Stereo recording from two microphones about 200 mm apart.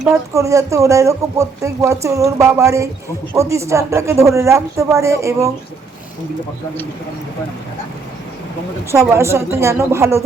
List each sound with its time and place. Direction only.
0.1 s speech: 15° right (ahead or behind)
8.9 s speech: 15° right (ahead or behind)